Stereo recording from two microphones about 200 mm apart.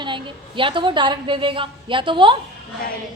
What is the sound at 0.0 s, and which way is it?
A woman's voice, 25° right (ahead or behind).